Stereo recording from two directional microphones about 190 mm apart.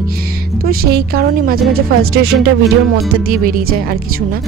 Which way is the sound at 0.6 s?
55° right (ahead or behind).